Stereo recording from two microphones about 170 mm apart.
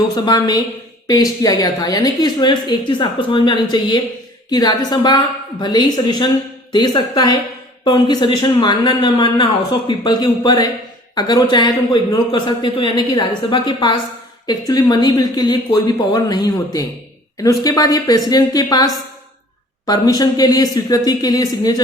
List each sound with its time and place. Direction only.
0.1 s a woman's voice: 25° left (ahead or behind)